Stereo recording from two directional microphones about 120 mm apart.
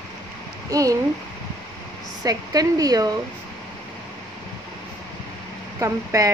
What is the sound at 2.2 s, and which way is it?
Speech, 30° right (ahead or behind).